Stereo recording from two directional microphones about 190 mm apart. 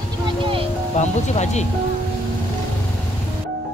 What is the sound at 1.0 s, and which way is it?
Speech, 35° left (ahead or behind).